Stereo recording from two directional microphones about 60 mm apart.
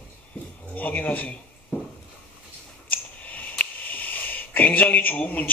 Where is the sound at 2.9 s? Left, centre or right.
Left.